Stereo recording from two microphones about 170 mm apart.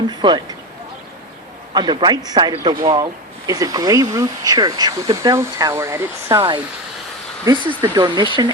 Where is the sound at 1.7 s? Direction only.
25° right (ahead or behind).